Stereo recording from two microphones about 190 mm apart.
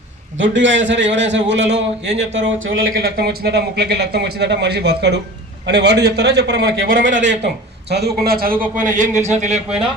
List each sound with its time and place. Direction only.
0.3 s a man's voice: 75° right (ahead or behind)
2.1 s speech: 80° right
3.0 s speech: 55° right (ahead or behind); by 9.6 s 40° right (ahead or behind)